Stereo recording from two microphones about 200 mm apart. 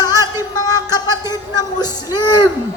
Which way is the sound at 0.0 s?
20° left (ahead or behind).